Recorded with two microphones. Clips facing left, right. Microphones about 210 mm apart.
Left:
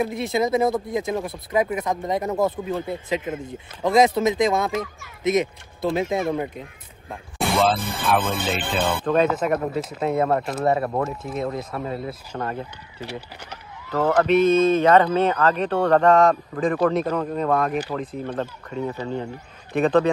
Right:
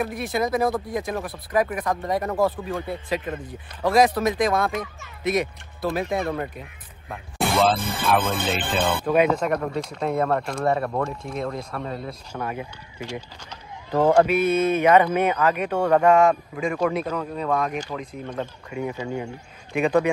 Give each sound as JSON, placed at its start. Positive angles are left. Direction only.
{"t": 0.0, "sound": "speech", "side_deg": 25}
{"t": 7.3, "sound": "speech", "side_deg": 0}
{"t": 10.6, "sound": "speech", "side_deg": 25}
{"t": 11.1, "sound": "speech", "side_deg": 5}
{"t": 12.3, "sound": "a man's voice", "side_deg": -10}
{"t": 13.8, "sound": "a man's voice", "side_deg": -15}
{"t": 17.0, "sound": "a man's voice", "side_deg": 40}
{"t": 17.5, "sound": "speech", "side_deg": 50}
{"t": 18.4, "sound": "a man's voice", "side_deg": -10}